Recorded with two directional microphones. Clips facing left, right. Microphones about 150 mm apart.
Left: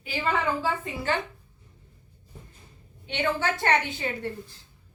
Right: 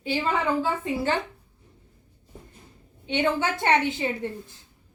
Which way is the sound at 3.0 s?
20° right (ahead or behind).